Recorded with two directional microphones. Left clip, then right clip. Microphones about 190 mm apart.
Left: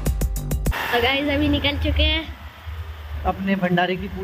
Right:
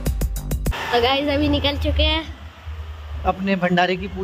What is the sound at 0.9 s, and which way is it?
A woman's voice, 25° right (ahead or behind).